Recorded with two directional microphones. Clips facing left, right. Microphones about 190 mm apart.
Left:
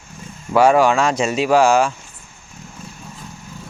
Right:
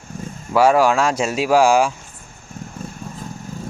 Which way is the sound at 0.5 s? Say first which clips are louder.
Left 1 dB; 5° right (ahead or behind).